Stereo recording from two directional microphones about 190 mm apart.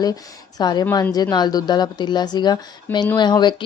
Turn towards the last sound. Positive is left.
turn(degrees=25)  # may be behind; listen again after turning